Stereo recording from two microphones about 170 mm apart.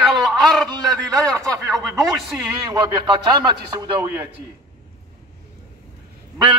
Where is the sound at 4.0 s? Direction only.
10° right (ahead or behind).